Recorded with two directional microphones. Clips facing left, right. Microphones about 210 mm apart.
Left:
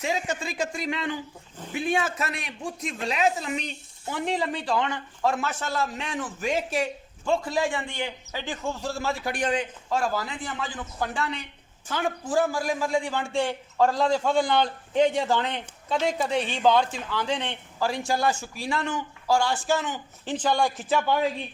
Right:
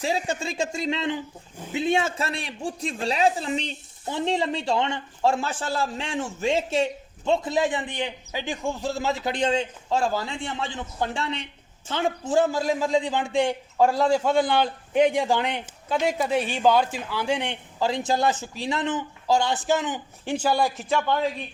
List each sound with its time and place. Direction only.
0.0 s a woman's voice: 30° right (ahead or behind); by 21.0 s centre (ahead or behind)